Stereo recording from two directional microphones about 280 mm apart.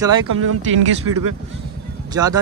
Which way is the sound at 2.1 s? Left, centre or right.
Centre.